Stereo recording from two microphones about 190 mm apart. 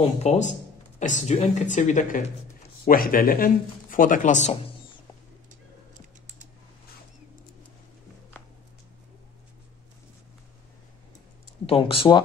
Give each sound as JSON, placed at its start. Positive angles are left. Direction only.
{"t": 0.0, "sound": "speech", "side_deg": 35}
{"t": 5.9, "sound": "typing", "side_deg": -40}
{"t": 11.6, "sound": "speech", "side_deg": 30}